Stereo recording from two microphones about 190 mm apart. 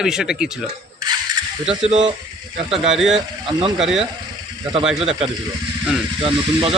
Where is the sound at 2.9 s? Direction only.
5° right (ahead or behind).